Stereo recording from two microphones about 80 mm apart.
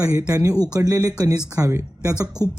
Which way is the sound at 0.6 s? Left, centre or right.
Right.